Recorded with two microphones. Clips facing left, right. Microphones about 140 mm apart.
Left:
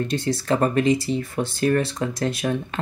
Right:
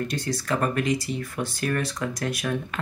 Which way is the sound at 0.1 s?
25° left (ahead or behind).